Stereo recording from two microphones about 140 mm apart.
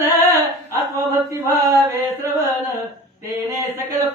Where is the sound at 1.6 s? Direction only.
20° right (ahead or behind).